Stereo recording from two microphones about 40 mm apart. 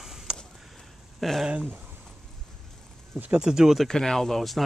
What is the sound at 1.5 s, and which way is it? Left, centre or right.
Speech, right.